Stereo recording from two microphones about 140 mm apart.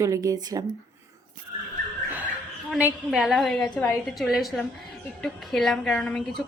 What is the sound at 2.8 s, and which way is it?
A woman's voice, 5° right (ahead or behind).